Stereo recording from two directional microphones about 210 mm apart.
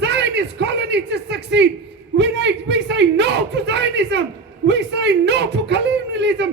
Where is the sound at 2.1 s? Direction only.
55° right (ahead or behind).